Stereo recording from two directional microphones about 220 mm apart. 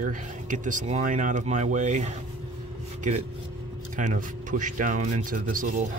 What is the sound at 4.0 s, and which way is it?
Speech, 35° right (ahead or behind).